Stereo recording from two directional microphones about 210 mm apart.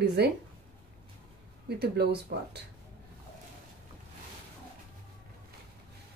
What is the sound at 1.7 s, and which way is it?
Speech, 50° right (ahead or behind).